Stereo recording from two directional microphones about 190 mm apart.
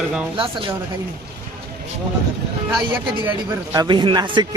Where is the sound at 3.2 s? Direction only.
15° right (ahead or behind).